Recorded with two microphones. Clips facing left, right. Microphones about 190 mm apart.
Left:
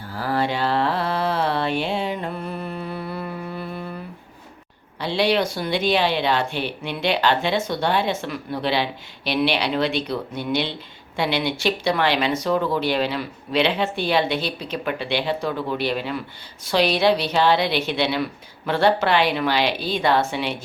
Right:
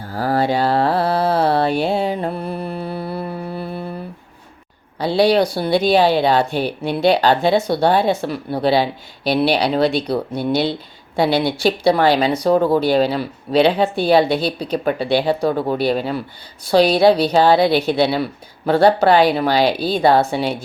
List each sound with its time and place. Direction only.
0.0 s mantra: 40° right (ahead or behind)
4.9 s a woman's voice: 35° right (ahead or behind)